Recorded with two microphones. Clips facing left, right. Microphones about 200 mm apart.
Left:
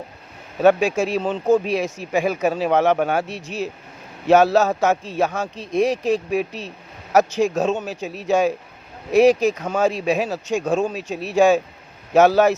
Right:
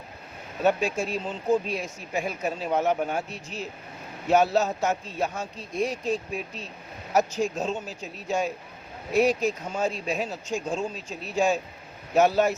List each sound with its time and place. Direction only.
0.6 s speech: 90° left
4.3 s speech: 90° left